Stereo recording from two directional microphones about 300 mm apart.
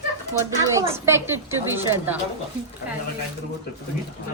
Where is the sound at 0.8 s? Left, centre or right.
Centre.